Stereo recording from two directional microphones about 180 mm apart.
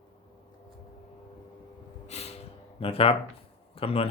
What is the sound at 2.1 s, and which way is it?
Gasp, 35° left (ahead or behind).